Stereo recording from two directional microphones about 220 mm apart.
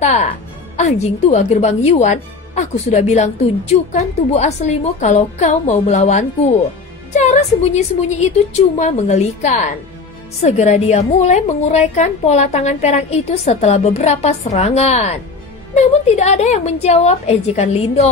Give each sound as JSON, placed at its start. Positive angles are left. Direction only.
{"t": 0.0, "sound": "a woman's voice", "side_deg": 30}